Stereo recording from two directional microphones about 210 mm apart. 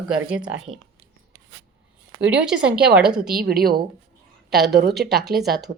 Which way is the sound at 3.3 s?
45° right (ahead or behind).